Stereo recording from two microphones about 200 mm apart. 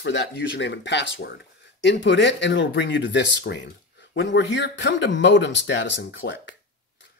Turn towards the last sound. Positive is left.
turn(degrees=60)  # may be behind; listen again after turning